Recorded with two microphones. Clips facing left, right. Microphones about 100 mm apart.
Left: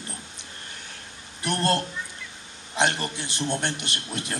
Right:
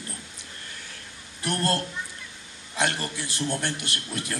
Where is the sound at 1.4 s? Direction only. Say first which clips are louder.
Left 2 dB; 20° left (ahead or behind).